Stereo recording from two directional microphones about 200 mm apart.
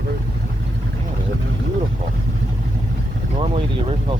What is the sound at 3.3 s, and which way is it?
Speech, 25° right (ahead or behind).